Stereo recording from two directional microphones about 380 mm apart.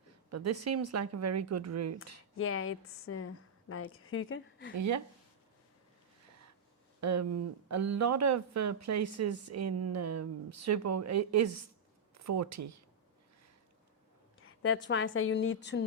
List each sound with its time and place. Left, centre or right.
0.3 s speech: right
2.4 s a woman's voice: left
4.8 s speech: right
7.0 s speech: right
14.4 s a sound: left
14.8 s a woman's voice: left